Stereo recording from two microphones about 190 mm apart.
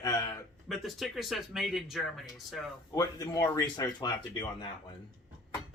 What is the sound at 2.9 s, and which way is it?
Speech, 20° left (ahead or behind).